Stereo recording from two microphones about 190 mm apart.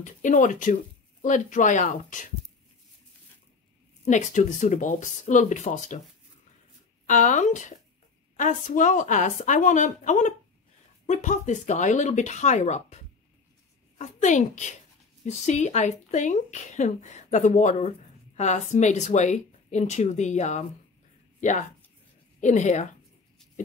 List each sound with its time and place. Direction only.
0.0 s speech: 40° left (ahead or behind)
4.0 s speech: 40° left (ahead or behind)
7.1 s speech: 40° left (ahead or behind)